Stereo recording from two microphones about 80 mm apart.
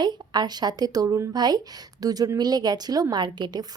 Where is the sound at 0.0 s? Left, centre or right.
Right.